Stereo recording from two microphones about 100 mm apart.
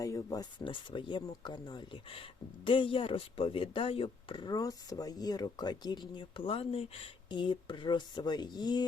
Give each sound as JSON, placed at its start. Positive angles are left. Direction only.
{"t": 0.0, "sound": "speech", "side_deg": 35}
{"t": 0.6, "sound": "speech", "side_deg": 55}
{"t": 2.6, "sound": "speech", "side_deg": 60}
{"t": 4.4, "sound": "speech", "side_deg": 40}
{"t": 7.3, "sound": "speech", "side_deg": 55}